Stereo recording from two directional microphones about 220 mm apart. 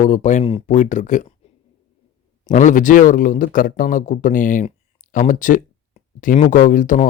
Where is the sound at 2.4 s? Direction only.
35° left (ahead or behind).